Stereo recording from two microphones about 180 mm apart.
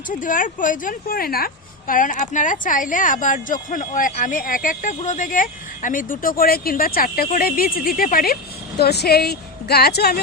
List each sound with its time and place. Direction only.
0.1 s a woman's voice: 50° left (ahead or behind)